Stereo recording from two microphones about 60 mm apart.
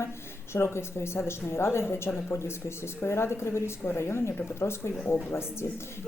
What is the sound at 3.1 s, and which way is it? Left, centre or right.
Speech, left.